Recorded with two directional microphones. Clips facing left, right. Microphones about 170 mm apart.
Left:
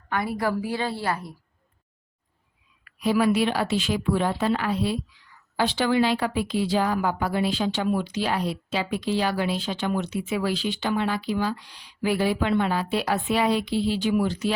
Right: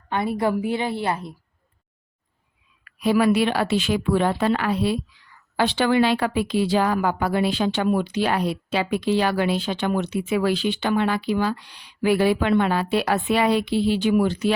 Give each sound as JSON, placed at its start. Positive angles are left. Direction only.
{"t": 0.1, "sound": "a woman's voice", "side_deg": -25}
{"t": 3.0, "sound": "a woman's voice", "side_deg": -65}